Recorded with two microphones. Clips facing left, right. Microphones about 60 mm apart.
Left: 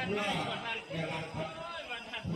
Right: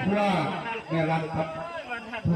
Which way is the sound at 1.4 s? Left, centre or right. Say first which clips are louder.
Right 7 dB; right.